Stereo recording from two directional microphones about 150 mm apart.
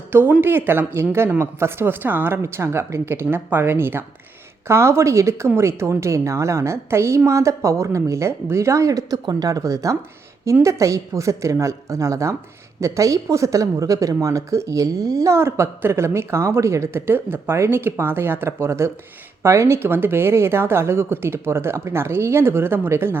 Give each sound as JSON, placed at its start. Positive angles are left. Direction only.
{"t": 0.1, "sound": "speech", "side_deg": -15}